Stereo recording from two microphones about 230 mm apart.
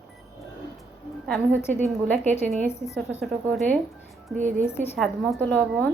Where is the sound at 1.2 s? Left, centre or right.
Centre.